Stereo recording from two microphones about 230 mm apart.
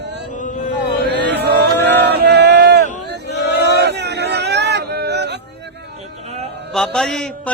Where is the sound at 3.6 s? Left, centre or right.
Right.